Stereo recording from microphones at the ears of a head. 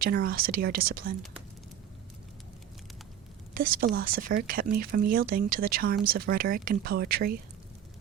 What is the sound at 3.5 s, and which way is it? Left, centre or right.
Speech, right.